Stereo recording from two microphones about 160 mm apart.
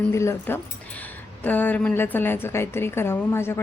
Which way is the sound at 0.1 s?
15° left (ahead or behind).